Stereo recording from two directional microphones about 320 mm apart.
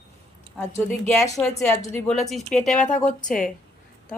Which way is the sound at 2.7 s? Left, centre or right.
Left.